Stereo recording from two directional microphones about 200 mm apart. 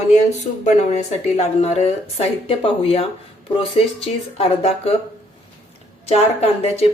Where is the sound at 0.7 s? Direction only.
35° left (ahead or behind).